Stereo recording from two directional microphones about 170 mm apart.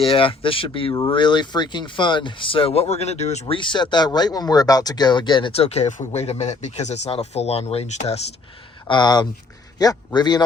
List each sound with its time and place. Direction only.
0.1 s speech: 30° left (ahead or behind)
8.9 s a man's voice: 25° left (ahead or behind)